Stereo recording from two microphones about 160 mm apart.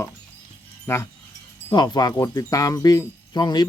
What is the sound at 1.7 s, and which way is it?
Speech, 25° left (ahead or behind).